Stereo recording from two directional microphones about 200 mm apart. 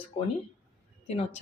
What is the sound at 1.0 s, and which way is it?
Speech, 30° left (ahead or behind).